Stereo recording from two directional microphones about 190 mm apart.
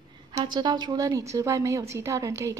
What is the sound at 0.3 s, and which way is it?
A woman's voice, 20° right (ahead or behind).